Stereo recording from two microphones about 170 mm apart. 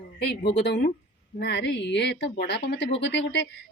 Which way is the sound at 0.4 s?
70° left (ahead or behind).